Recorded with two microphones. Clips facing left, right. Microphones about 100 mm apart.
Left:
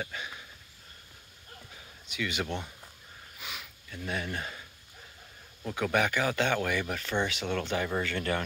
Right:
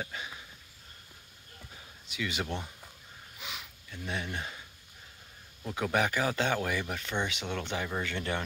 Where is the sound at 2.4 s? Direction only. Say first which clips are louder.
Left 1 dB; centre (ahead or behind).